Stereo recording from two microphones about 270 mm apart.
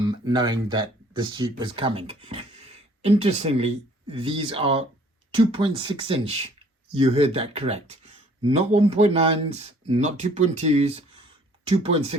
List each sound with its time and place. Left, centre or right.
0.3 s speech: centre